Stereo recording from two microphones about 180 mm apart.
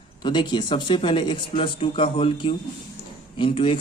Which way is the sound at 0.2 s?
25° left (ahead or behind).